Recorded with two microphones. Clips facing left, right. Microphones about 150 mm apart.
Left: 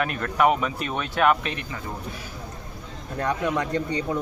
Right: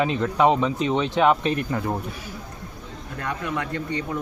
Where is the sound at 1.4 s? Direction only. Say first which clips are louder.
Right 8 dB; 35° right (ahead or behind).